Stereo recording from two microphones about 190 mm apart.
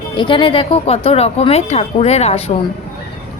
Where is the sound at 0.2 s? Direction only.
25° left (ahead or behind).